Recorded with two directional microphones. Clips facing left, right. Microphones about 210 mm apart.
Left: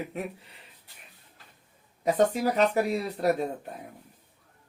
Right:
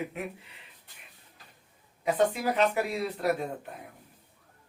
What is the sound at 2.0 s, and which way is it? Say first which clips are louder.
Speech: left 2 dB; 40° left (ahead or behind).